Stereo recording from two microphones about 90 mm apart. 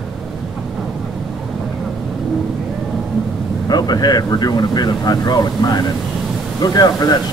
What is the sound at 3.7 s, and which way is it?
Speech, 50° left (ahead or behind).